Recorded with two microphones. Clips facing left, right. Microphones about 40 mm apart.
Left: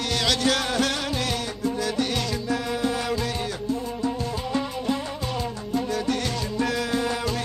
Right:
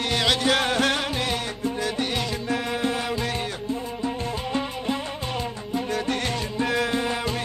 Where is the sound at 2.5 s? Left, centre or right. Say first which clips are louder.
Even; right.